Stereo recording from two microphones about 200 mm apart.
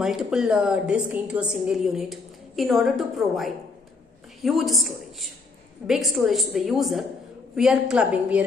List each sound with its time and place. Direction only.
0.0 s a woman's voice: centre (ahead or behind)